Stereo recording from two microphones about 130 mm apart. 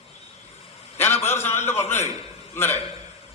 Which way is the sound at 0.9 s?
20° left (ahead or behind).